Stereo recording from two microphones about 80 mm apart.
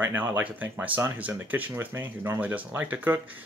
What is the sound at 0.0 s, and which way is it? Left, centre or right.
Speech, right.